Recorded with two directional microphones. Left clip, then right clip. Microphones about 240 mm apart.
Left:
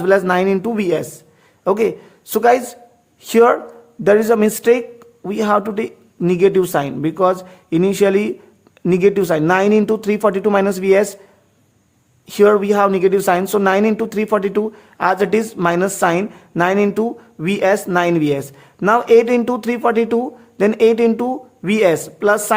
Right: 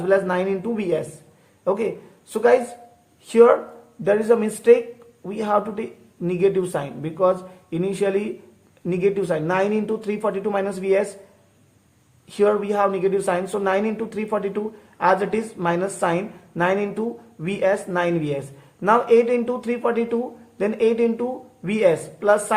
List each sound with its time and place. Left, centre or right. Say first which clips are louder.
0.0 s a man's voice: left 6 dB; left
12.3 s speech: left 7 dB; left